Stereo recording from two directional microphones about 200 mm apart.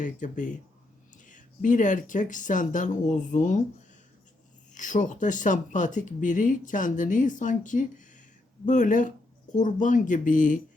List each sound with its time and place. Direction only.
0.0 s speech: 40° left (ahead or behind)
4.7 s speech: 40° left (ahead or behind)